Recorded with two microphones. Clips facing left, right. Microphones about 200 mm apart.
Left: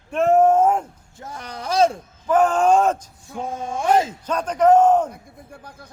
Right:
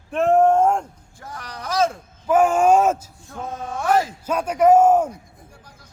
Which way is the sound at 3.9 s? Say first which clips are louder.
Left 1 dB; 25° left (ahead or behind).